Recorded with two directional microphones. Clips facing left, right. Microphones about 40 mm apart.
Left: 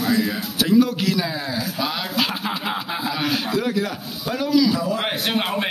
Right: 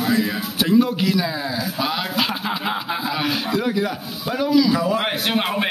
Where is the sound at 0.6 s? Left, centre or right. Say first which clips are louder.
Even; centre.